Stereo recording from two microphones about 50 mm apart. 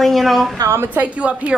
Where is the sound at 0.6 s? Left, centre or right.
Right.